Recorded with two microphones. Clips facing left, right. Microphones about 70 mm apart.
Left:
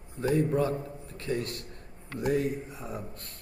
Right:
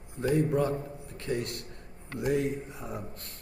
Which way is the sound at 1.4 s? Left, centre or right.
Left.